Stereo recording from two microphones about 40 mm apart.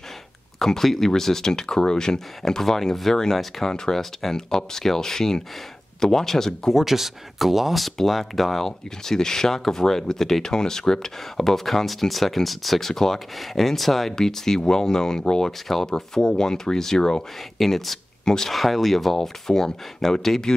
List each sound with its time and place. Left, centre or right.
0.6 s speech: centre
6.7 s speech: centre
17.6 s speech: centre